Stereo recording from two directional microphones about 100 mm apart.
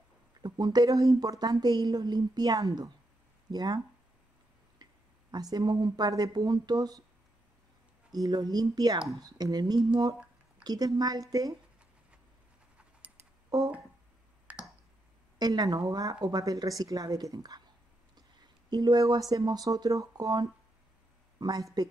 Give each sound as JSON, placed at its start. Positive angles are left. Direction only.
{"t": 0.4, "sound": "a woman's voice", "side_deg": -45}
{"t": 4.8, "sound": "a sound", "side_deg": -45}
{"t": 5.3, "sound": "speech", "side_deg": -45}
{"t": 8.1, "sound": "a woman's voice", "side_deg": -40}
{"t": 14.5, "sound": "clicking", "side_deg": -15}
{"t": 15.3, "sound": "a woman's voice", "side_deg": -45}
{"t": 18.7, "sound": "a woman's voice", "side_deg": -45}